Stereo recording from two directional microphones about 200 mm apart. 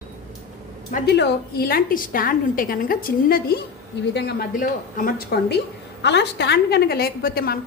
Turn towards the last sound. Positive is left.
turn(degrees=50)  # may be behind; listen again after turning